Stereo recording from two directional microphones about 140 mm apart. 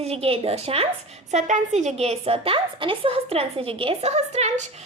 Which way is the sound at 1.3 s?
60° right (ahead or behind).